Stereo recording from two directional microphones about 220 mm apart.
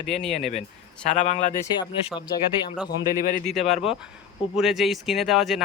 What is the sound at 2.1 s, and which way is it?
Speech, 20° left (ahead or behind).